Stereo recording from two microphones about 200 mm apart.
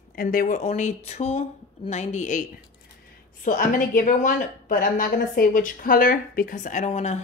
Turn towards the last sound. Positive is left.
turn(degrees=35)  # may be behind; listen again after turning